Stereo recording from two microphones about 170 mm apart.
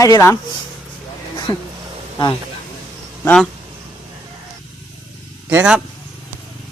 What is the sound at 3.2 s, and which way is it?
Speech, 5° left (ahead or behind).